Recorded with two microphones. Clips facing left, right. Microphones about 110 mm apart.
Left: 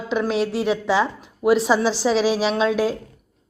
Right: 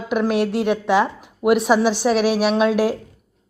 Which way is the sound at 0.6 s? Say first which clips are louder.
Right 2 dB; 15° right (ahead or behind).